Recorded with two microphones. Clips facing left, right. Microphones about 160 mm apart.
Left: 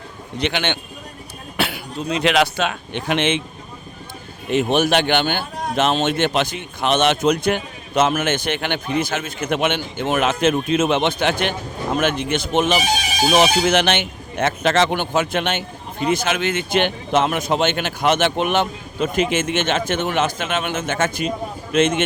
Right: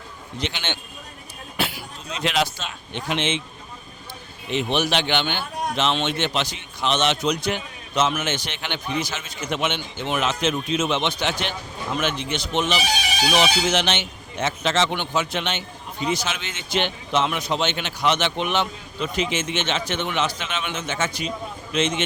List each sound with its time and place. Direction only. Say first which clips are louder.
0.3 s a man's voice: left 7 dB; 65° left (ahead or behind)
4.4 s speech: left 6 dB; 50° left (ahead or behind)